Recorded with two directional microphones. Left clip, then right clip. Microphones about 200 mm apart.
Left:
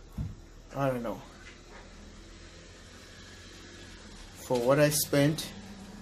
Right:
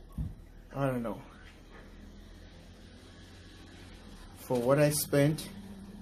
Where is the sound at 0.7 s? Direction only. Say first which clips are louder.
Left 2 dB; 15° right (ahead or behind).